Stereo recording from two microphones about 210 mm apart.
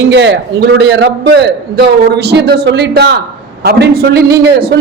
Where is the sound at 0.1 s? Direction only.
60° right (ahead or behind).